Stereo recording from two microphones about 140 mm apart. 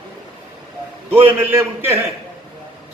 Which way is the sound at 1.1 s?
15° right (ahead or behind).